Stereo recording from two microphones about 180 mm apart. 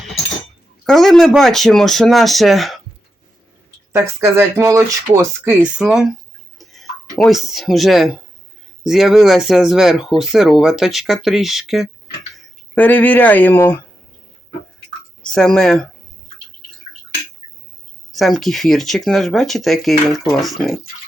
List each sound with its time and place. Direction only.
0.9 s speech: centre (ahead or behind)
3.9 s speech: 10° right (ahead or behind)
5.6 s speech: 5° right (ahead or behind)
7.3 s speech: centre (ahead or behind)
12.7 s speech: 10° left (ahead or behind)
15.2 s speech: 5° left (ahead or behind)
18.1 s speech: centre (ahead or behind)